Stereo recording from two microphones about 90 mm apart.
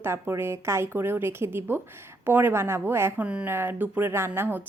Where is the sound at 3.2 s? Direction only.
15° right (ahead or behind).